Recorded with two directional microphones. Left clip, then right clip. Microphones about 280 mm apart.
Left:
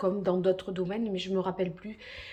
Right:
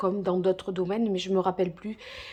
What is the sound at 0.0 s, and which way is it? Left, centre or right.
Speech, centre.